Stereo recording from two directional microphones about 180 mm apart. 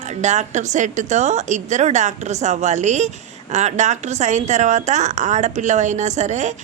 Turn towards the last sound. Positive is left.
turn(degrees=-40)  # may be behind; listen again after turning